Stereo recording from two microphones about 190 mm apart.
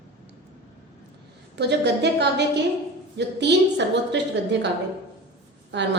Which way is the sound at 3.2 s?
65° right (ahead or behind).